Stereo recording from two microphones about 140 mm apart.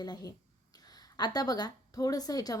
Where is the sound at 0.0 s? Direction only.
25° left (ahead or behind).